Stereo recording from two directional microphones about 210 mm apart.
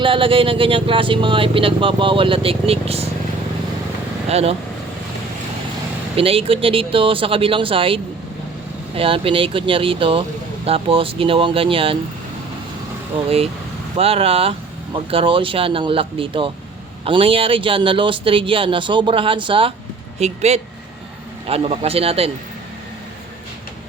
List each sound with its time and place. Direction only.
0.0 s speech: 25° right (ahead or behind)
4.3 s speech: 30° right (ahead or behind)
6.1 s speech: 25° right (ahead or behind)
13.9 s speech: 30° right (ahead or behind)